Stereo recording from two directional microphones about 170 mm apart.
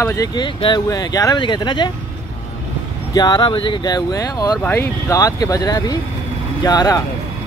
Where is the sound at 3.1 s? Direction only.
25° left (ahead or behind).